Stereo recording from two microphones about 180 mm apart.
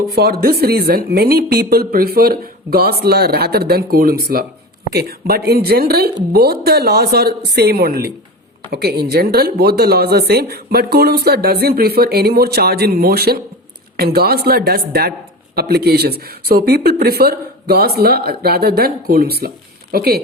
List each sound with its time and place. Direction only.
0.1 s speech: 55° right (ahead or behind)